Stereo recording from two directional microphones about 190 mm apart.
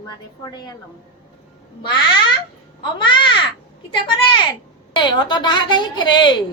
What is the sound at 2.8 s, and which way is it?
Speech, 25° left (ahead or behind).